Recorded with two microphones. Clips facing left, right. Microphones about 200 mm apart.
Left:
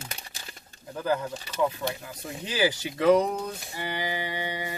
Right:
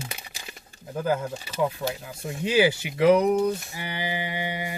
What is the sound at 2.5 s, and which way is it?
Speech, 15° right (ahead or behind).